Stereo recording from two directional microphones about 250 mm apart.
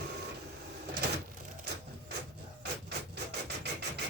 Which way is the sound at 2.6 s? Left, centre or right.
Right.